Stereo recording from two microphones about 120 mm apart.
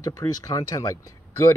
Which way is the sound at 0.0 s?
30° left (ahead or behind).